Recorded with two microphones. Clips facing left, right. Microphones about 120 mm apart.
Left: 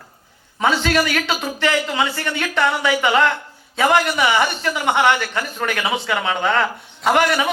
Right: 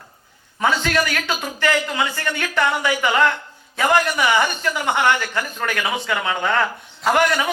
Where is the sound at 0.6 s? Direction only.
20° left (ahead or behind).